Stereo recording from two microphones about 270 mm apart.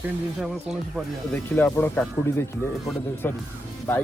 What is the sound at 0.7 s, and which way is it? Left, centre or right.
Speech, centre.